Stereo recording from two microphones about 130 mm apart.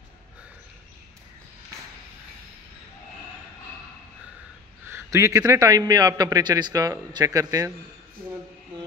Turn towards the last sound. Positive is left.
turn(degrees=-25)  # may be behind; listen again after turning